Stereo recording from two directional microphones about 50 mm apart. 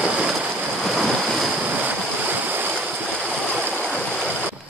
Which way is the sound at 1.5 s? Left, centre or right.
Right.